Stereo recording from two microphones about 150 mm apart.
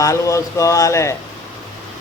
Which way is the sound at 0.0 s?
20° left (ahead or behind).